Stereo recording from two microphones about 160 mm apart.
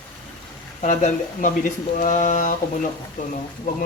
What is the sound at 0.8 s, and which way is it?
Speech, 50° left (ahead or behind).